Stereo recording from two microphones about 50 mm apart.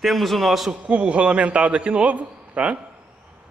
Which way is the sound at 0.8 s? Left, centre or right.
Right.